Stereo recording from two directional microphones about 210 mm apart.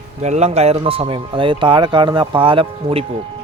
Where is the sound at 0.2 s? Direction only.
30° right (ahead or behind).